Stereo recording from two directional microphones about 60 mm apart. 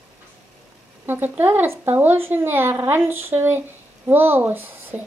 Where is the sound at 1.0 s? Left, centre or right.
Right.